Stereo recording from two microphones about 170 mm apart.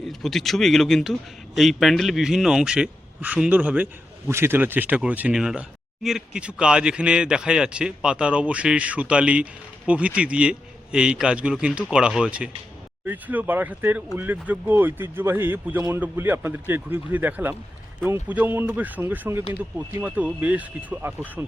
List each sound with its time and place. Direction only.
0.0 s a man's voice: centre (ahead or behind)